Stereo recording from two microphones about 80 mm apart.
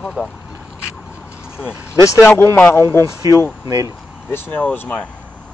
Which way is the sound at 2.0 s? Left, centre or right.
Left.